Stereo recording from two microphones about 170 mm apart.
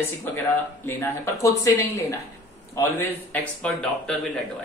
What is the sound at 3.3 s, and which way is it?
Speech, 10° left (ahead or behind).